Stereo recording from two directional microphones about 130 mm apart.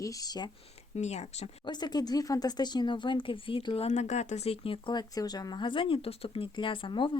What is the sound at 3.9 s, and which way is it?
Speech, 60° left (ahead or behind).